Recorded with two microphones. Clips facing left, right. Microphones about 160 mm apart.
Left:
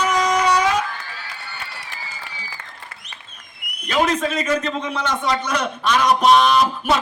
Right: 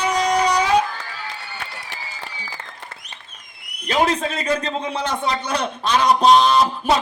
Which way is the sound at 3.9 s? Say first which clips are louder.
Even; 30° right (ahead or behind).